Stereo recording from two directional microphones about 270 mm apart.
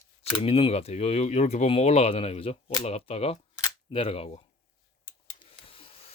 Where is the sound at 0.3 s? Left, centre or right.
Left.